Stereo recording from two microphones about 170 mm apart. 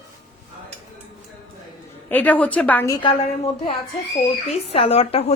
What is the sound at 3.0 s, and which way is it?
A woman's voice, 30° left (ahead or behind).